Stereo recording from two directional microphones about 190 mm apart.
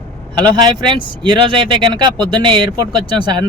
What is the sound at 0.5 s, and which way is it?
Speech, 25° right (ahead or behind).